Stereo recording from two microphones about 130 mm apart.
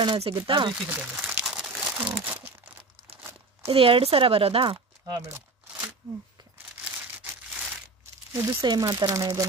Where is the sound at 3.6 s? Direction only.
45° right (ahead or behind).